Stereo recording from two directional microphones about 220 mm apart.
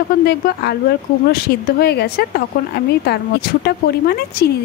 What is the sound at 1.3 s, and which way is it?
Speech, 45° left (ahead or behind).